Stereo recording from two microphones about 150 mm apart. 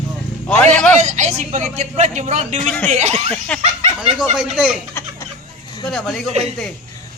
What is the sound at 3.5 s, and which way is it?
Speech, 10° left (ahead or behind).